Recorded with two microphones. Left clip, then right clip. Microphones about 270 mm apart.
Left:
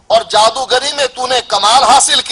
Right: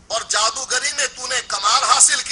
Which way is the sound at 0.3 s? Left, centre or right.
Left.